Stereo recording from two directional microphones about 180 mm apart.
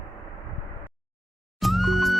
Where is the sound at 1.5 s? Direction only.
Centre (ahead or behind).